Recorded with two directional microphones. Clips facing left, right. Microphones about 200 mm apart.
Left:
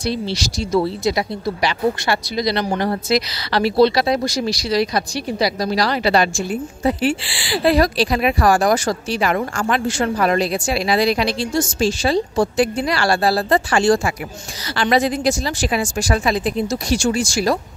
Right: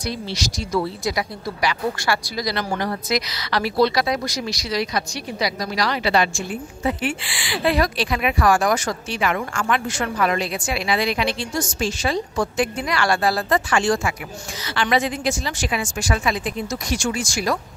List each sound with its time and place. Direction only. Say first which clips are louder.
0.0 s speech: left 5 dB; 30° left (ahead or behind)